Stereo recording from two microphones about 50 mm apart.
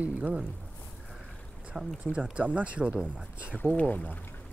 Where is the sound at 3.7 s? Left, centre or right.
Left.